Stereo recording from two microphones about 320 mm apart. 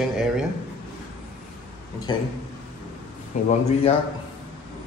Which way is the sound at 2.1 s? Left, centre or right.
Centre.